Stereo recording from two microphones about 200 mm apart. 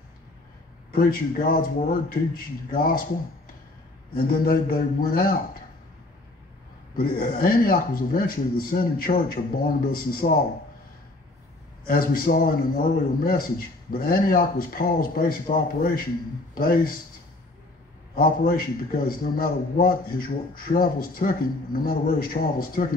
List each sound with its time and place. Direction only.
0.9 s a man's voice: 45° left (ahead or behind)
4.1 s a man's voice: 45° left (ahead or behind)
7.0 s a man's voice: 45° left (ahead or behind)
11.9 s a man's voice: 45° left (ahead or behind)
18.1 s a man's voice: 45° left (ahead or behind)